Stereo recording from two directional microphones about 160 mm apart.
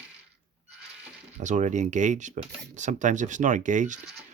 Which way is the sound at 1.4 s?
50° right (ahead or behind).